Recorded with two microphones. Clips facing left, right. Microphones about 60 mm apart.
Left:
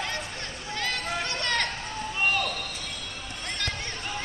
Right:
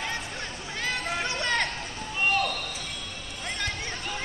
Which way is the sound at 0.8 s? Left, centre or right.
Centre.